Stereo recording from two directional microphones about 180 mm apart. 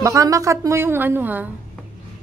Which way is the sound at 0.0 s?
15° right (ahead or behind).